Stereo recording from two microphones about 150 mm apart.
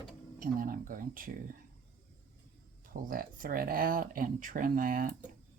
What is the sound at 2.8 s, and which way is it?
Speech, 70° right (ahead or behind).